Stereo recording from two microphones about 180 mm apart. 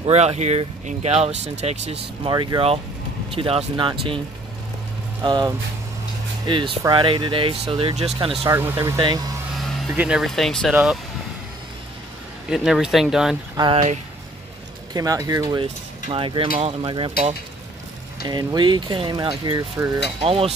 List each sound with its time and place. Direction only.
0.0 s speech: 35° right (ahead or behind)
5.2 s speech: 25° right (ahead or behind)
8.5 s speech: 15° right (ahead or behind)
9.6 s speech: centre (ahead or behind)
12.4 s speech: 5° right (ahead or behind)
13.6 s speech: 25° right (ahead or behind)
15.0 s speech: 20° right (ahead or behind)
16.1 s speech: 30° right (ahead or behind)
20.2 s speech: 30° right (ahead or behind)